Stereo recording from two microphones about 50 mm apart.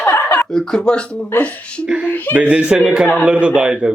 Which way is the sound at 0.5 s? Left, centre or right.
Centre.